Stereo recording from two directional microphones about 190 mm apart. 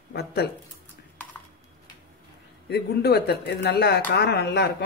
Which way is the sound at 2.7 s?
55° left (ahead or behind).